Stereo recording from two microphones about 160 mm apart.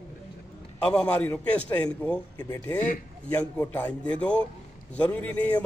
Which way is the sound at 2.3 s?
20° left (ahead or behind).